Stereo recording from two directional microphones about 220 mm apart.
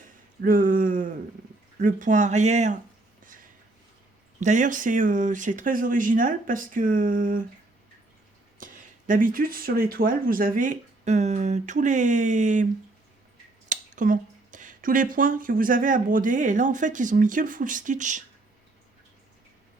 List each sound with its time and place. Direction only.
0.0 s a sound: 40° right (ahead or behind)
1.8 s speech: 35° right (ahead or behind)
4.4 s speech: 35° right (ahead or behind)
8.5 s speech: 35° right (ahead or behind)
13.7 s speech: 35° right (ahead or behind)